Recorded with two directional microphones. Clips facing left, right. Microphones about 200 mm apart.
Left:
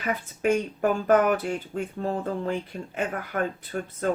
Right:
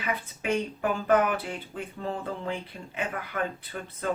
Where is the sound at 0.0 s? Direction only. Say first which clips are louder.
Left 6 dB; 45° left (ahead or behind).